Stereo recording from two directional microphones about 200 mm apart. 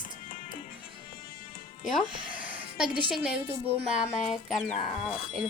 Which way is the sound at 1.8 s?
Centre (ahead or behind).